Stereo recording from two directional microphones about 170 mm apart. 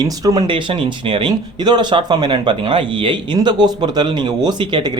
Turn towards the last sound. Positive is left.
turn(degrees=-25)  # may be behind; listen again after turning